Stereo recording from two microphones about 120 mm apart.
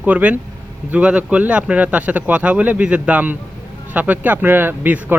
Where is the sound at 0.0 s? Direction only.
10° right (ahead or behind).